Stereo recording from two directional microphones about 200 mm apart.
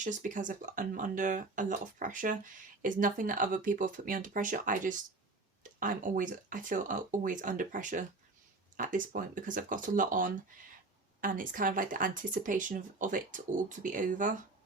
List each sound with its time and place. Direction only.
0.0 s speech: 40° right (ahead or behind)